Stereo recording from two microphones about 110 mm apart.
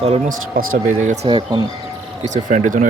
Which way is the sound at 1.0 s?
90° right.